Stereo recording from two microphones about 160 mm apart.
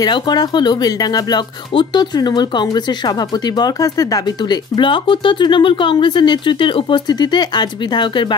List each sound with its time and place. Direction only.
0.0 s speech: 25° left (ahead or behind)